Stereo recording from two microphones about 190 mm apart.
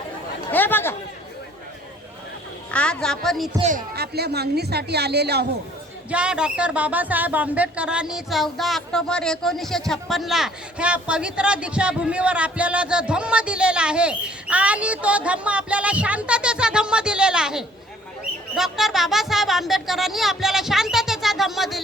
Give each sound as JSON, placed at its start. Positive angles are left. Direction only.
{"t": 0.5, "sound": "speech", "side_deg": 10}
{"t": 2.7, "sound": "speech", "side_deg": 5}
{"t": 3.6, "sound": "speech", "side_deg": -40}
{"t": 3.9, "sound": "a woman's voice", "side_deg": -55}
{"t": 6.1, "sound": "speech", "side_deg": -5}